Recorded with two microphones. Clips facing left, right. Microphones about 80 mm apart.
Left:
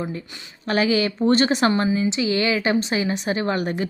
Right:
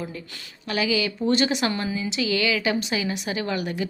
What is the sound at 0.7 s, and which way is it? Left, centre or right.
A woman's voice, left.